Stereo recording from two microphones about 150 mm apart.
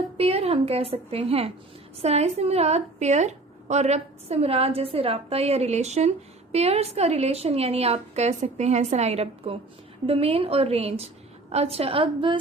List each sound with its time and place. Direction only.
0.2 s a woman's voice: 40° right (ahead or behind)